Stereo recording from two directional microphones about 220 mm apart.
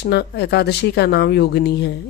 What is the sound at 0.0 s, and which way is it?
Speech, 50° left (ahead or behind).